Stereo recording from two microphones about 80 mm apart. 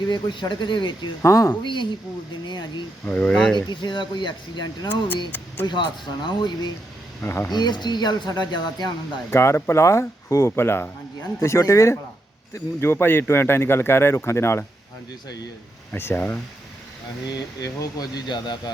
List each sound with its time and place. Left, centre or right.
0.1 s speech: left
1.2 s speech: left
1.6 s speech: left
3.1 s speech: centre
3.7 s speech: left
7.2 s speech: left
7.5 s speech: left
9.3 s speech: left
15.9 s speech: left
17.3 s speech: left